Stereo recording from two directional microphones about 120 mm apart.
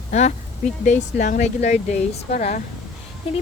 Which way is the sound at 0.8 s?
85° left.